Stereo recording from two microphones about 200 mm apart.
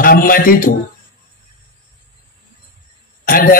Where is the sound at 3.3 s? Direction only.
45° left (ahead or behind).